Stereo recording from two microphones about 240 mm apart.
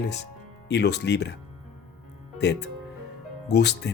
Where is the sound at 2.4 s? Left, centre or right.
Left.